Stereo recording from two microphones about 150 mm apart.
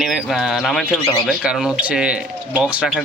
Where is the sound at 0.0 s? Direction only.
Centre (ahead or behind).